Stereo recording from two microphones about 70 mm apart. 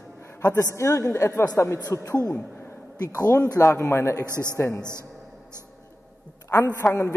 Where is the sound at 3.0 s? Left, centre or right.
Left.